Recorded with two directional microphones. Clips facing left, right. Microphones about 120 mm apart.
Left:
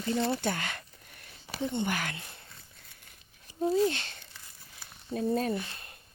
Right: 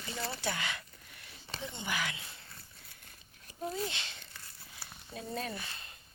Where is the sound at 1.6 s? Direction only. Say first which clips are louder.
Left 7 dB; 50° left (ahead or behind).